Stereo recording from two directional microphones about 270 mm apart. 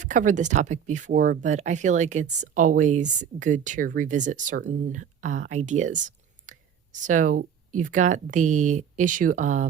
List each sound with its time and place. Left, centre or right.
0.0 s speech: right